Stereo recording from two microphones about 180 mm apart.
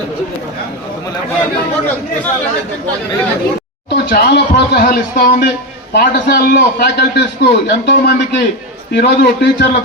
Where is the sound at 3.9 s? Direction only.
65° left (ahead or behind).